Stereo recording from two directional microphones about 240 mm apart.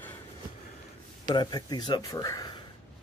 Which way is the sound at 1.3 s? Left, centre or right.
Centre.